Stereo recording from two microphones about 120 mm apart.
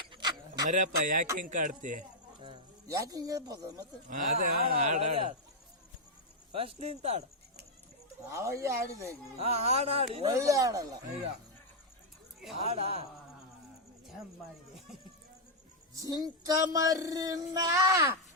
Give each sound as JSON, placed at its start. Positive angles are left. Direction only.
{"t": 0.1, "sound": "a sound", "side_deg": -35}
{"t": 0.7, "sound": "speech", "side_deg": -90}
{"t": 2.8, "sound": "child singing", "side_deg": -30}
{"t": 4.1, "sound": "speech", "side_deg": -90}
{"t": 4.9, "sound": "speech", "side_deg": -70}
{"t": 6.5, "sound": "speech", "side_deg": -55}
{"t": 8.3, "sound": "child singing", "side_deg": -25}
{"t": 9.4, "sound": "speech", "side_deg": -60}
{"t": 10.3, "sound": "child singing", "side_deg": -25}
{"t": 12.5, "sound": "speech", "side_deg": -55}
{"t": 16.0, "sound": "child singing", "side_deg": -30}